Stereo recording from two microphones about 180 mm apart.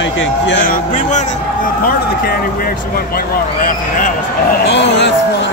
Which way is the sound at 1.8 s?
55° left (ahead or behind).